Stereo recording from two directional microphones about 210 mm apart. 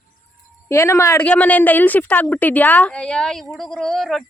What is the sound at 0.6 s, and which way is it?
A woman's voice, 15° left (ahead or behind).